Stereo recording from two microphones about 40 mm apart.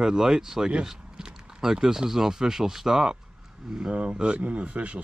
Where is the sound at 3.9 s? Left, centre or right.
Right.